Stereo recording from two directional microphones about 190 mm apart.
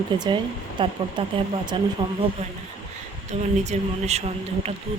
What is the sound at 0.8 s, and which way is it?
Speech, 25° right (ahead or behind).